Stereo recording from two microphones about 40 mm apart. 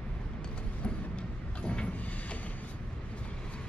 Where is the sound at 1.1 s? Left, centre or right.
Left.